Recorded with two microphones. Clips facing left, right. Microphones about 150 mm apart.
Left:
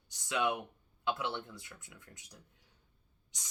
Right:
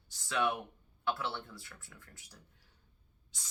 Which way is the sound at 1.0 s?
20° left (ahead or behind).